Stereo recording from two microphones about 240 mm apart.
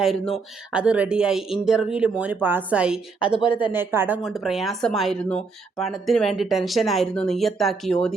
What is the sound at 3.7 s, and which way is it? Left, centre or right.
Speech, centre.